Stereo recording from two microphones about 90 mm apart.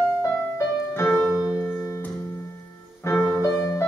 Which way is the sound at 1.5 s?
30° left (ahead or behind).